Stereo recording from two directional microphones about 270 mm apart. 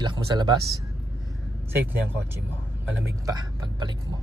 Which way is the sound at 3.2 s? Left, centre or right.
Centre.